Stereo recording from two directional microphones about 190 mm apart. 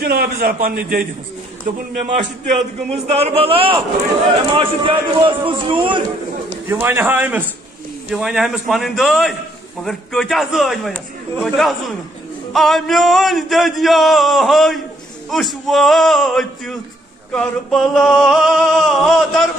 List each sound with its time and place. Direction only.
0.0 s a man's voice: 55° right (ahead or behind)
2.0 s a man's voice: 40° right (ahead or behind)
6.7 s a man's voice: 10° right (ahead or behind)
8.1 s a sound: centre (ahead or behind)